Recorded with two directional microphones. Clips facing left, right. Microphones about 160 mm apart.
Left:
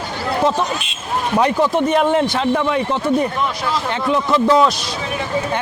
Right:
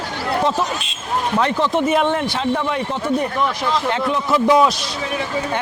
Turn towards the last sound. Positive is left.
turn(degrees=-10)  # may be behind; listen again after turning